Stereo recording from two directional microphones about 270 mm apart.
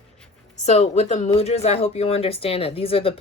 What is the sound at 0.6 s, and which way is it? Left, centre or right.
Speech, left.